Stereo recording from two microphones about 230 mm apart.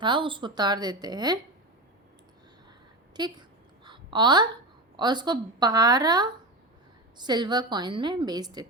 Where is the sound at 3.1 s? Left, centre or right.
Centre.